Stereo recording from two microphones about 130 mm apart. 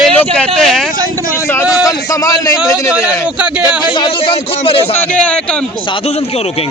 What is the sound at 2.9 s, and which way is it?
Speech, 10° right (ahead or behind).